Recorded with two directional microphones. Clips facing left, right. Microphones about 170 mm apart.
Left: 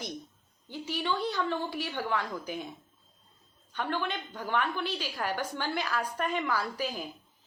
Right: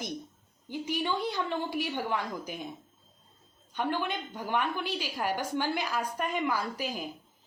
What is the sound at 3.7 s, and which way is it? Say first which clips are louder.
A woman's voice: right 2 dB; 15° right (ahead or behind).